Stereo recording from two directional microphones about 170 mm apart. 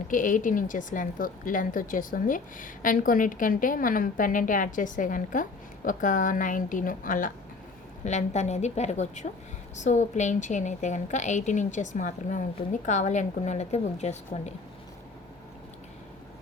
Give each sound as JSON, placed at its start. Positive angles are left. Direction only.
{"t": 0.1, "sound": "a woman's voice", "side_deg": 50}